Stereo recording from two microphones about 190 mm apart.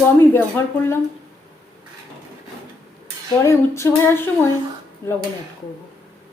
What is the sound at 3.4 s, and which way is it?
Female singing, 15° left (ahead or behind).